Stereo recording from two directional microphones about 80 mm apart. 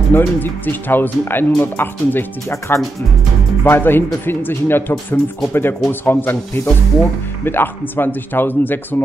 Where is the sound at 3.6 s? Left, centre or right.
Left.